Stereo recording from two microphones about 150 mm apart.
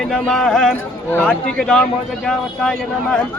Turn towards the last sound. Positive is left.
turn(degrees=5)  # may be behind; listen again after turning